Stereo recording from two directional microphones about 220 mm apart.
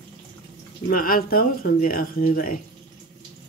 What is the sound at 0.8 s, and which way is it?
Speech, 40° left (ahead or behind).